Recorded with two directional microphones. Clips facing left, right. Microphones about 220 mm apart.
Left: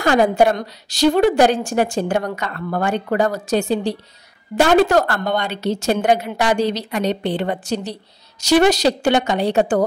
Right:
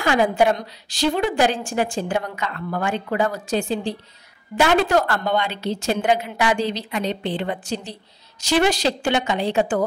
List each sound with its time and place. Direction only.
0.0 s a woman's voice: 40° left (ahead or behind)